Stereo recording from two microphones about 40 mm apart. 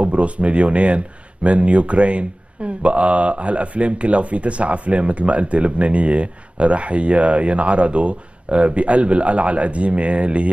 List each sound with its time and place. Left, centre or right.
0.0 s speech: right